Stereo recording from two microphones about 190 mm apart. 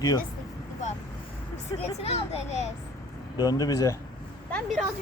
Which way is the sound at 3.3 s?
20° left (ahead or behind).